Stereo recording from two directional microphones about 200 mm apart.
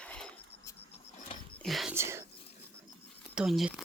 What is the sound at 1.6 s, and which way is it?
Speech, centre (ahead or behind).